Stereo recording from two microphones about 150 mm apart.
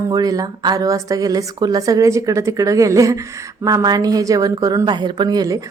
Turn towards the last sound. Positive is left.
turn(degrees=-25)  # may be behind; listen again after turning